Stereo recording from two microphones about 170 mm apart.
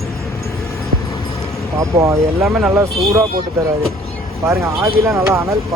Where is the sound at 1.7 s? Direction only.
15° right (ahead or behind).